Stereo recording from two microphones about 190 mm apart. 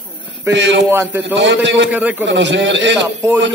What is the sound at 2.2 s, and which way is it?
Speech, 70° right (ahead or behind).